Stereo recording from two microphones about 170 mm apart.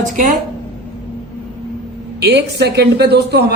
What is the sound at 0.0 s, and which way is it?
Speech, 50° right (ahead or behind).